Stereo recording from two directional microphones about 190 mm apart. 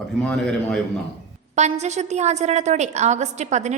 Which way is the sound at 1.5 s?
35° right (ahead or behind).